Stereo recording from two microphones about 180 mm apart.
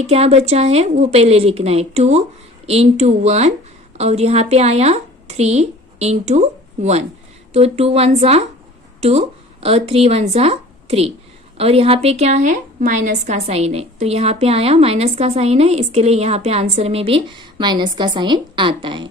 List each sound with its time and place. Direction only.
0.0 s a woman's voice: 35° right (ahead or behind)